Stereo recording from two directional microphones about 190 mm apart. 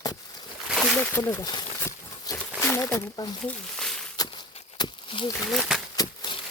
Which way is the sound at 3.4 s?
5° left (ahead or behind).